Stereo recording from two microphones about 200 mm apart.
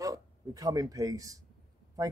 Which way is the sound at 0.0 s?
15° right (ahead or behind).